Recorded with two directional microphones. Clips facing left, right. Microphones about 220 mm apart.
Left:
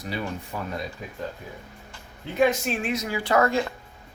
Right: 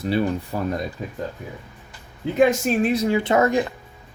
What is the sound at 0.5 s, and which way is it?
Speech, 40° right (ahead or behind).